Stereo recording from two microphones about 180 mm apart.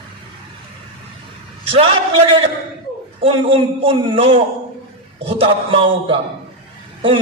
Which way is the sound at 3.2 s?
30° right (ahead or behind).